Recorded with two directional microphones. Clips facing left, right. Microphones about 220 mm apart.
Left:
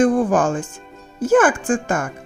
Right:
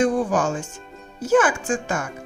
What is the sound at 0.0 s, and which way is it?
Speech, 55° left (ahead or behind).